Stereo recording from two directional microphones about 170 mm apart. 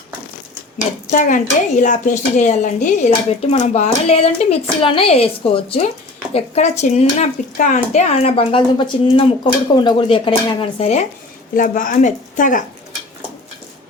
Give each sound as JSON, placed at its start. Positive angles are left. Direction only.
{"t": 1.1, "sound": "a woman's voice", "side_deg": 50}
{"t": 11.5, "sound": "a woman's voice", "side_deg": 50}